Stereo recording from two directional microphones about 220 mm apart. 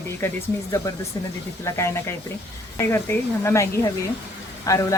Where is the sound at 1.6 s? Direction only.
15° left (ahead or behind).